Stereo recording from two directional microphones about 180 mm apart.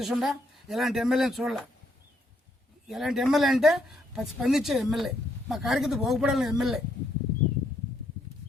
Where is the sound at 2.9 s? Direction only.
Centre (ahead or behind).